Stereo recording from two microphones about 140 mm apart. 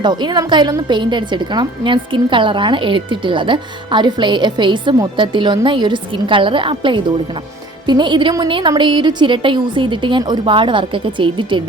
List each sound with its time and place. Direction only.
0.0 s a woman's voice: 30° right (ahead or behind)